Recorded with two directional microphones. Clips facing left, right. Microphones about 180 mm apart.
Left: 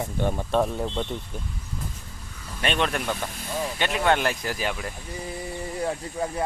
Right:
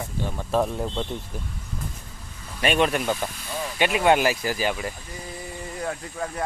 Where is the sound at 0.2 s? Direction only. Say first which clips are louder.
Left 5 dB; 55° left (ahead or behind).